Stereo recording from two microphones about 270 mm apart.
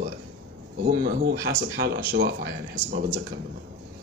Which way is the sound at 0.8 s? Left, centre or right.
Right.